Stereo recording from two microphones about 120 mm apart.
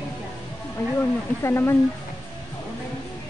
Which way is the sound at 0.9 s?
20° left (ahead or behind).